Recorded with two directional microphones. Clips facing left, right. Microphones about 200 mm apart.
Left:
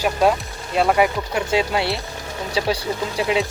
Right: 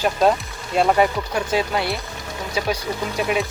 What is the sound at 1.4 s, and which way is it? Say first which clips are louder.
Speech: left 1 dB; 20° left (ahead or behind).